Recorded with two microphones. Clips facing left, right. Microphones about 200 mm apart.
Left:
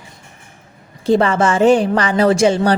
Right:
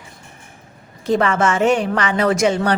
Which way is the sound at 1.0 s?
30° left (ahead or behind).